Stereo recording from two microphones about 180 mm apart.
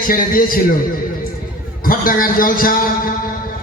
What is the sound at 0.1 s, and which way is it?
Speech, 50° left (ahead or behind).